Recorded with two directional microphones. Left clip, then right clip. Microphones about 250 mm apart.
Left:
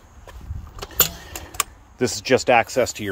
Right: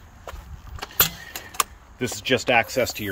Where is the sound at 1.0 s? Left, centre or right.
Left.